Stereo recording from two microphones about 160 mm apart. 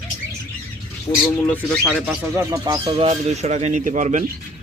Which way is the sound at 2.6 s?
30° right (ahead or behind).